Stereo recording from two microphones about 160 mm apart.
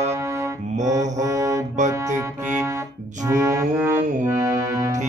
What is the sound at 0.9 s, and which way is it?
Music, 20° right (ahead or behind).